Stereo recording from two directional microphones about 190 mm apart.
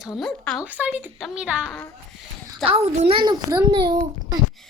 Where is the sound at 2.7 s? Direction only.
30° right (ahead or behind).